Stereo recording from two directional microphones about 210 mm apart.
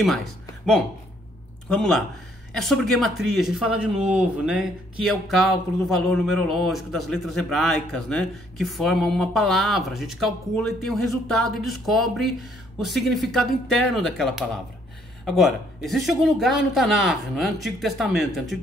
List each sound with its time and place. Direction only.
1.7 s speech: centre (ahead or behind)